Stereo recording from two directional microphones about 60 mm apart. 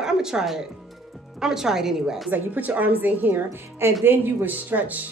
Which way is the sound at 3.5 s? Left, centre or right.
Right.